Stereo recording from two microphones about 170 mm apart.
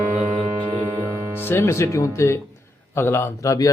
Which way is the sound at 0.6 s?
10° left (ahead or behind).